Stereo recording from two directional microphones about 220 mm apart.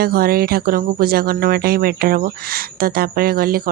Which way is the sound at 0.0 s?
45° right (ahead or behind).